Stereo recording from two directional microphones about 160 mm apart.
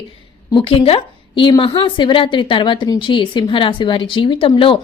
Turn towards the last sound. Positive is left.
turn(degrees=35)  # may be behind; listen again after turning